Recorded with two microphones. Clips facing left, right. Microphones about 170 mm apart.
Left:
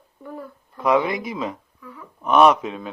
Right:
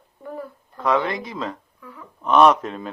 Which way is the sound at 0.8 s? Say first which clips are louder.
Left 2 dB; 15° left (ahead or behind).